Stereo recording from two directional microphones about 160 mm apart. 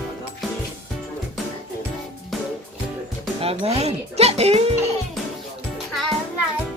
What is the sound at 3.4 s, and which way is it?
Speech, 40° right (ahead or behind).